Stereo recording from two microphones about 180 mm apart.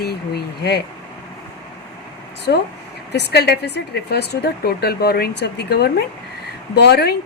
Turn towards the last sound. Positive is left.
turn(degrees=65)  # may be behind; listen again after turning